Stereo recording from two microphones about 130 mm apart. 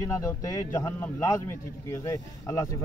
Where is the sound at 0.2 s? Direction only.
25° left (ahead or behind).